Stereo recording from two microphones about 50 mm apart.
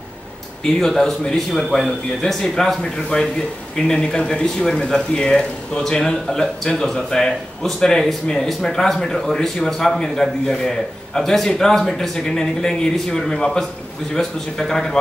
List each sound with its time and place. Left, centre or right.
0.7 s speech: centre
3.1 s speech: centre